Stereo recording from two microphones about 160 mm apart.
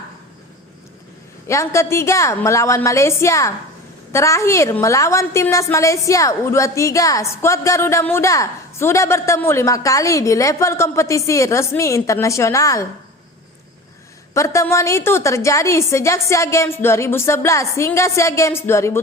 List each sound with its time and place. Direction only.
1.5 s a woman's voice: 20° left (ahead or behind)
14.3 s a woman's voice: 20° left (ahead or behind)